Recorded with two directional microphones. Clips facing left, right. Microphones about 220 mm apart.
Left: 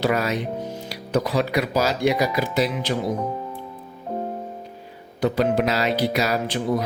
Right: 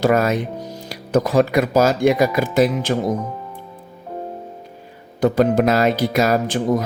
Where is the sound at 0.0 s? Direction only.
50° right (ahead or behind).